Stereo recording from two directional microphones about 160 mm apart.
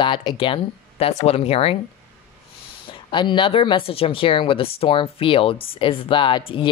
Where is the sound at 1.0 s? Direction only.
40° left (ahead or behind).